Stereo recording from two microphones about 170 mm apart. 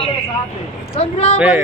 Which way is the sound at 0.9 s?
35° left (ahead or behind).